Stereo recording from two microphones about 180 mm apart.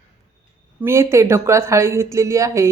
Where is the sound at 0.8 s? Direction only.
15° right (ahead or behind).